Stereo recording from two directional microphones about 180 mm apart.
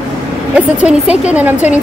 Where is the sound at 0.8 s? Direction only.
5° right (ahead or behind).